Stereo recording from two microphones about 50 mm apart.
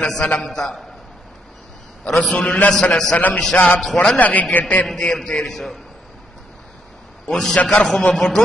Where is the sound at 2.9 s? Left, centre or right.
Centre.